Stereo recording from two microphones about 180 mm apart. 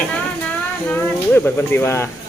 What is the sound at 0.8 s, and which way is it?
Speech, 10° left (ahead or behind).